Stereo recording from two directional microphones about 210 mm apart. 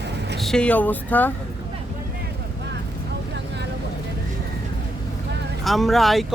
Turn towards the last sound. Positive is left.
turn(degrees=0)  # may be behind; listen again after turning